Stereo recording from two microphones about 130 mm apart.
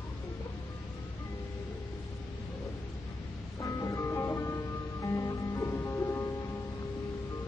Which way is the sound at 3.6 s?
25° left (ahead or behind).